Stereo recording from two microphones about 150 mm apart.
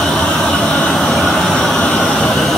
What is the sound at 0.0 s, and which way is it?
Vehicle, 5° left (ahead or behind).